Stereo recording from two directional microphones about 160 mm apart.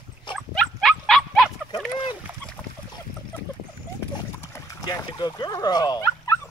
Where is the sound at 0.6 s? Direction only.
Centre (ahead or behind).